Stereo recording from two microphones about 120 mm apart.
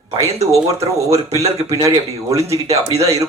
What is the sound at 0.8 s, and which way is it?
A man's voice, 25° right (ahead or behind).